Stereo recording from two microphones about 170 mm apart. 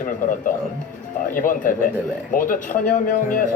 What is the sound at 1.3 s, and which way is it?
A man's voice, 50° left (ahead or behind).